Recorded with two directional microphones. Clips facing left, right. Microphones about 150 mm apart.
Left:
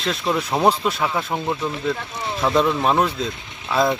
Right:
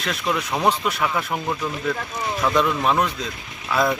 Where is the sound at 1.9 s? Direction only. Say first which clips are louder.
Even; centre (ahead or behind).